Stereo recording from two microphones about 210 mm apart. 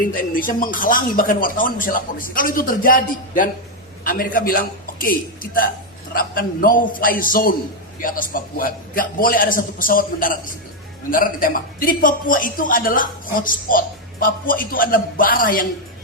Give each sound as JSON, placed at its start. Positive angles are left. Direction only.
{"t": 0.0, "sound": "a man's voice", "side_deg": 40}